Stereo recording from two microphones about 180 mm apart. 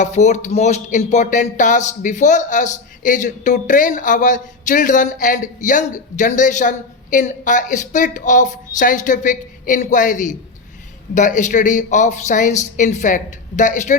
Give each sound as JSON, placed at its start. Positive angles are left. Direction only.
{"t": 0.0, "sound": "speech", "side_deg": 40}